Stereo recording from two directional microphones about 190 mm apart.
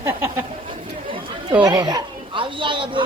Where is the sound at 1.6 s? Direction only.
20° right (ahead or behind).